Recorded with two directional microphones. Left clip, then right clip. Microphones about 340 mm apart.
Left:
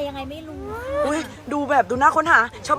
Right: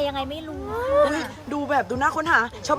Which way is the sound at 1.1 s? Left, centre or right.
Centre.